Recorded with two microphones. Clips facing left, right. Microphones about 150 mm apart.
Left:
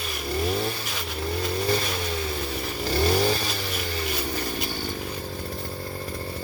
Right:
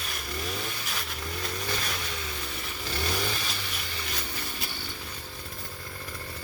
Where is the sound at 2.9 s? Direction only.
35° left (ahead or behind).